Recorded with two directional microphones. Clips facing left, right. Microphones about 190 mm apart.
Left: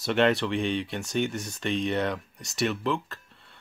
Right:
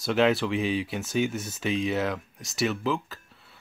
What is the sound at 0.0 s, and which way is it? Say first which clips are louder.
Speech: even; centre (ahead or behind).